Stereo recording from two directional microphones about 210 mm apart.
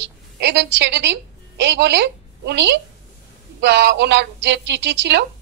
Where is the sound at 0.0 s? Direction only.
55° right (ahead or behind).